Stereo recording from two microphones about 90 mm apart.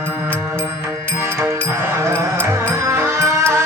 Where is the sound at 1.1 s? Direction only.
25° right (ahead or behind).